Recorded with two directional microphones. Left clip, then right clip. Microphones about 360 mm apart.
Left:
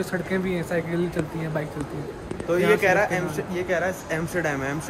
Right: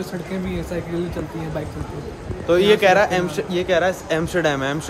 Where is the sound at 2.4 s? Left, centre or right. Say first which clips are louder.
Right 5 dB; right.